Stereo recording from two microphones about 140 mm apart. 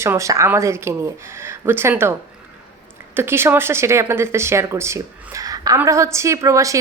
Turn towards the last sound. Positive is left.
turn(degrees=-25)  # may be behind; listen again after turning